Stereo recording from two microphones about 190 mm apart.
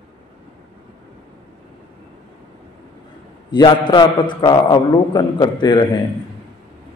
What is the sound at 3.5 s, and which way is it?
A man's voice, 25° left (ahead or behind).